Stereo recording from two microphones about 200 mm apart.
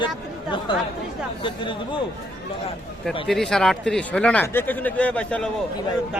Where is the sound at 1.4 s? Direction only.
25° left (ahead or behind).